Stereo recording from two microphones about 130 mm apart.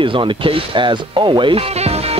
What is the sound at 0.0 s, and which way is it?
Speech, 40° right (ahead or behind).